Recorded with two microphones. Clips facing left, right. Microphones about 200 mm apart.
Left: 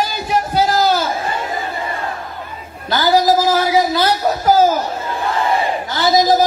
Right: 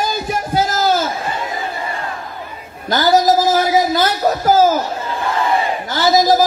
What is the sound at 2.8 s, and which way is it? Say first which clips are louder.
A woman's voice: right 1 dB; 45° right (ahead or behind).